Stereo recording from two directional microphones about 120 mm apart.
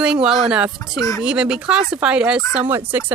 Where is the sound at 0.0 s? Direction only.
5° right (ahead or behind).